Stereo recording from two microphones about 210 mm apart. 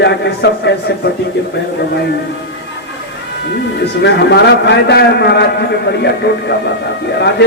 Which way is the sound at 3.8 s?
55° left (ahead or behind).